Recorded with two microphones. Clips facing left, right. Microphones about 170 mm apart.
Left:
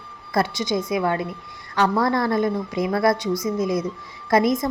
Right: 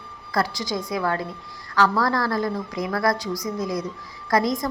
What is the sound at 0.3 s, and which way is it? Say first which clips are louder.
A woman's voice: left 3 dB; 25° left (ahead or behind).